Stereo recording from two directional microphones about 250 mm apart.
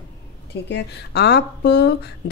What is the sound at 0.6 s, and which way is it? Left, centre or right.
Speech, left.